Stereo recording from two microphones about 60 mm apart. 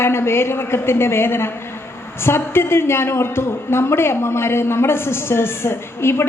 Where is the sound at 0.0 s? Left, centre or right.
Left.